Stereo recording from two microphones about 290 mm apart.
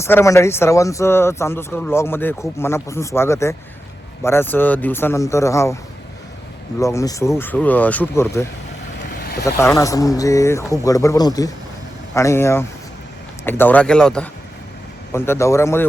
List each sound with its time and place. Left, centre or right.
0.0 s speech: centre
6.7 s speech: centre
9.0 s boat: left
9.4 s speech: centre